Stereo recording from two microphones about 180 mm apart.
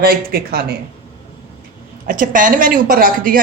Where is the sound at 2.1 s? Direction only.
45° right (ahead or behind).